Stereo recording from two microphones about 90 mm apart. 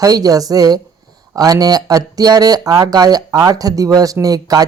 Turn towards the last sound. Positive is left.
turn(degrees=-45)  # may be behind; listen again after turning